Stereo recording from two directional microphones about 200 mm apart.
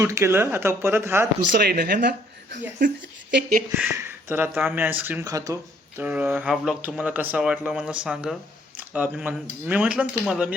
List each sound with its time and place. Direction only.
0.0 s speech: 15° right (ahead or behind)
1.6 s speech: 50° right (ahead or behind)
3.7 s speech: 15° right (ahead or behind)